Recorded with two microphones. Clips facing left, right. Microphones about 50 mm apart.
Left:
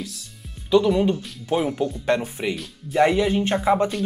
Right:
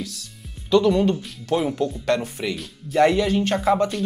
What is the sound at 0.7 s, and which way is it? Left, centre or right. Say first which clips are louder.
Speech: even; centre.